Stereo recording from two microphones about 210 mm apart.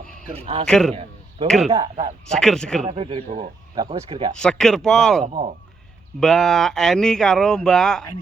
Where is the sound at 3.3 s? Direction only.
40° right (ahead or behind).